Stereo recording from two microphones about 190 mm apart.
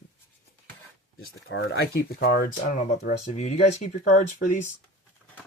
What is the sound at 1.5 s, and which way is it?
Speech, 75° left (ahead or behind).